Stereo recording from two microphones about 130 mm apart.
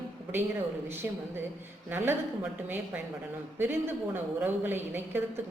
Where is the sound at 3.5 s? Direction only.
15° right (ahead or behind).